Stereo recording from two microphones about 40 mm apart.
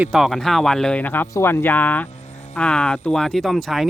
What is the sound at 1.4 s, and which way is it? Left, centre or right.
Speech, left.